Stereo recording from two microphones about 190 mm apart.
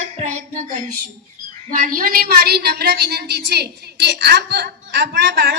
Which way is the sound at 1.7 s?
50° right (ahead or behind).